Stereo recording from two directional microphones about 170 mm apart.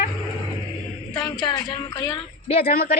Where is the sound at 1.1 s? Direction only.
25° left (ahead or behind).